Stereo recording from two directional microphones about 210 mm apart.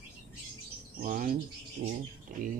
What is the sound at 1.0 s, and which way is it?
Speech, 40° right (ahead or behind).